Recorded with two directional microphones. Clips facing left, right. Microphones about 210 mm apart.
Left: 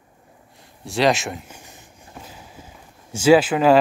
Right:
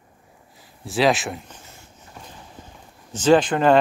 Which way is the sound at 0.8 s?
Centre (ahead or behind).